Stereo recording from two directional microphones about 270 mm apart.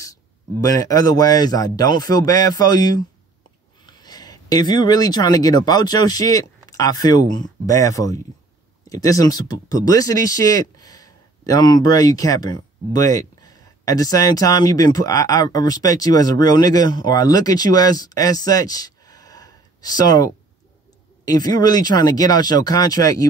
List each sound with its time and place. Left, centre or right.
0.0 s speech: centre
21.3 s speech: centre